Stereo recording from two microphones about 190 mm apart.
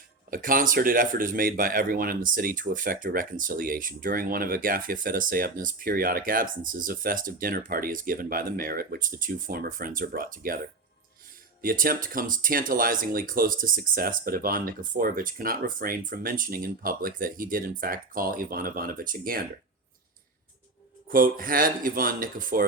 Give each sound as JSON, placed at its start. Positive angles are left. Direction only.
{"t": 0.3, "sound": "a man's voice", "side_deg": -45}
{"t": 11.6, "sound": "a man's voice", "side_deg": -50}
{"t": 21.1, "sound": "a man's voice", "side_deg": -50}